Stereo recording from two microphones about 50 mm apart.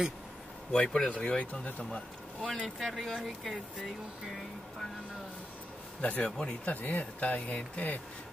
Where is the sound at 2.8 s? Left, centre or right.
Centre.